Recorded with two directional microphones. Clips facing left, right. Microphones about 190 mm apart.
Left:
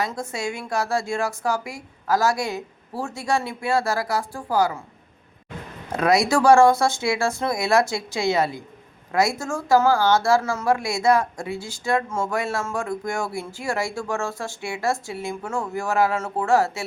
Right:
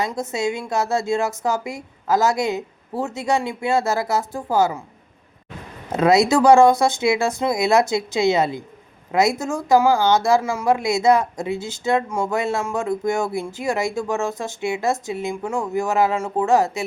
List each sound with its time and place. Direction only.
0.0 s a woman's voice: 20° right (ahead or behind)
5.9 s a woman's voice: 25° right (ahead or behind)